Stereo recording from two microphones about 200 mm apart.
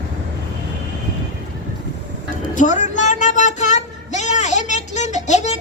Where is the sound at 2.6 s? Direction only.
40° left (ahead or behind).